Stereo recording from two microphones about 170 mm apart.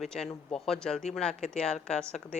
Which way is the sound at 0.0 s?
Centre (ahead or behind).